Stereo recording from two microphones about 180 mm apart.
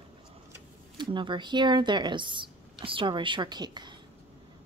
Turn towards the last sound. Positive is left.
turn(degrees=-25)  # may be behind; listen again after turning